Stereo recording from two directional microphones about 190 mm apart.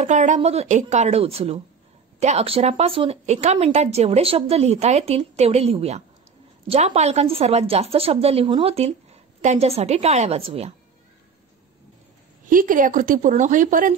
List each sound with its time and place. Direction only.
0.0 s a woman's voice: 40° right (ahead or behind)
12.4 s a woman's voice: 45° right (ahead or behind)